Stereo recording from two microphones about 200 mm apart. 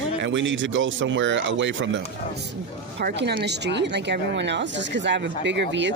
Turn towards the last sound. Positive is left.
turn(degrees=-65)  # may be behind; listen again after turning